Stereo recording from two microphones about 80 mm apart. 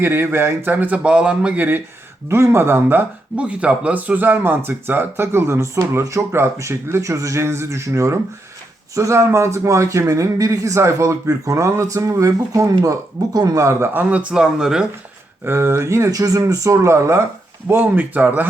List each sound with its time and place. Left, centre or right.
0.0 s speech: right
2.3 s a man's voice: right
3.3 s a man's voice: centre; by 13.7 s right
13.7 s speech: right; by 14.8 s centre
15.4 s a man's voice: right
17.7 s speech: right